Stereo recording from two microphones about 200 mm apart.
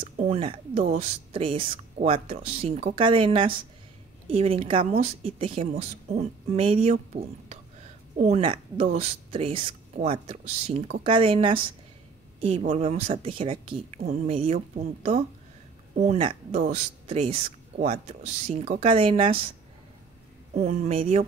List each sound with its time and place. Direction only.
0.0 s speech: 30° right (ahead or behind)
16.0 s speech: 30° right (ahead or behind)
20.5 s speech: 35° right (ahead or behind)